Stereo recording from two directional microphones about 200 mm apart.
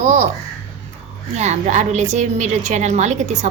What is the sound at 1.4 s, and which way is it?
A woman's voice, 35° right (ahead or behind).